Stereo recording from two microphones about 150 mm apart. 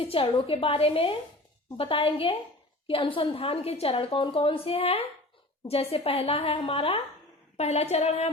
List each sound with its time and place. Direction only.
0.0 s a woman's voice: 40° left (ahead or behind)